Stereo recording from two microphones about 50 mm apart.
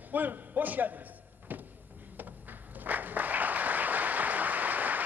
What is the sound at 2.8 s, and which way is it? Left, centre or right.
Applause, right.